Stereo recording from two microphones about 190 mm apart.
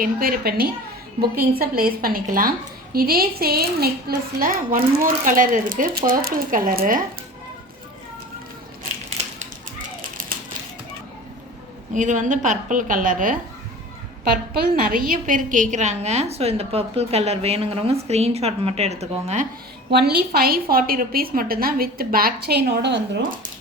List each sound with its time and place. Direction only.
0.0 s a woman's voice: 50° right (ahead or behind)
9.0 s a sound: 40° right (ahead or behind)
11.9 s a woman's voice: 40° right (ahead or behind)
19.9 s a woman's voice: 55° right (ahead or behind)